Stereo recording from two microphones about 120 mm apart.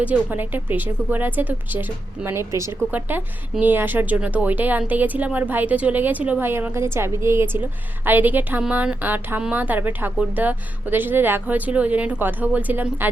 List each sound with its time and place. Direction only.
0.0 s a woman's voice: 15° right (ahead or behind)